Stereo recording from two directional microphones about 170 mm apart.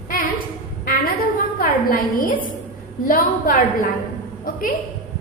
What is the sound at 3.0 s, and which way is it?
A woman's voice, 55° left (ahead or behind).